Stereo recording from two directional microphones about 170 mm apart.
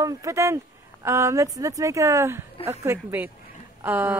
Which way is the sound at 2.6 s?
15° right (ahead or behind).